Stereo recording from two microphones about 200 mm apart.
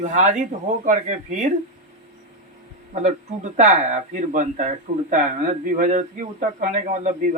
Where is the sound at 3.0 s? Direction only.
35° right (ahead or behind).